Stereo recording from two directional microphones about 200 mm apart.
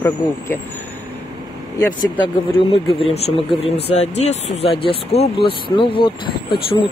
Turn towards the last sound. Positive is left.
turn(degrees=25)  # may be behind; listen again after turning